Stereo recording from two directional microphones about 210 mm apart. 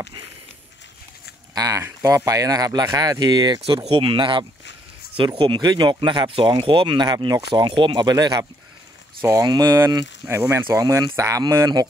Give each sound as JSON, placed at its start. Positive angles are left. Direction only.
{"t": 1.5, "sound": "speech", "side_deg": -15}